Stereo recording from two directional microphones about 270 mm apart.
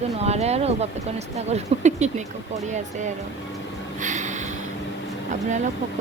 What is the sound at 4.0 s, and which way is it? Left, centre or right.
Snort, right.